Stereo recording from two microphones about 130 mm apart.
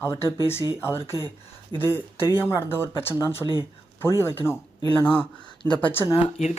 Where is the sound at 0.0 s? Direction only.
20° left (ahead or behind).